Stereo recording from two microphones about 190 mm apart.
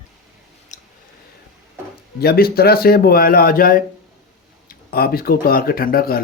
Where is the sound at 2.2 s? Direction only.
55° left (ahead or behind).